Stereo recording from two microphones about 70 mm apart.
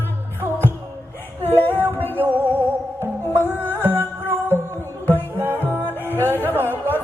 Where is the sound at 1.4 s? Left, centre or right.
Left.